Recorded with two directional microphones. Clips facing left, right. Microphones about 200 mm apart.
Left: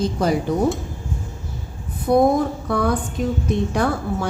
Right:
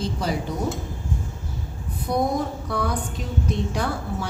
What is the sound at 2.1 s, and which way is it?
A woman's voice, 55° left (ahead or behind).